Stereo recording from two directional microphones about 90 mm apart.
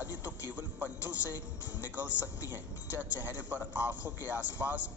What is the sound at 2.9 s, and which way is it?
A man's voice, 20° right (ahead or behind).